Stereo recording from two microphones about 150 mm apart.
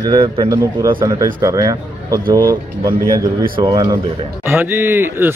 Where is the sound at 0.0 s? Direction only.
30° right (ahead or behind).